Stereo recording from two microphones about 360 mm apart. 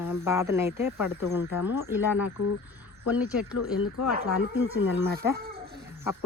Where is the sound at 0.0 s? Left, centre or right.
Centre.